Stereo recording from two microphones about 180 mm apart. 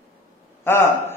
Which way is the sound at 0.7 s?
15° left (ahead or behind).